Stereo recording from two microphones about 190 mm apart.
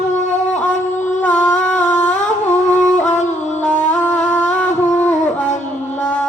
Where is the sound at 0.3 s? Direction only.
40° left (ahead or behind).